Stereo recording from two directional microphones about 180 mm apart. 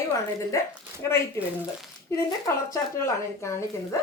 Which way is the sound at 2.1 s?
15° left (ahead or behind).